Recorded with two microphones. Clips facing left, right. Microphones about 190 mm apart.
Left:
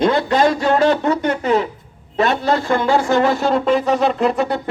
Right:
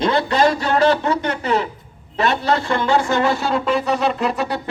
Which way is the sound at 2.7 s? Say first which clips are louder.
Left 4 dB; 50° left (ahead or behind).